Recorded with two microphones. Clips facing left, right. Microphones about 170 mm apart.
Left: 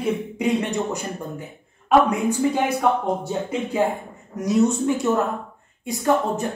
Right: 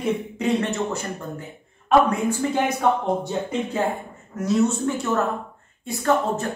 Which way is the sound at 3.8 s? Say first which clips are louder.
Left 2 dB; 10° left (ahead or behind).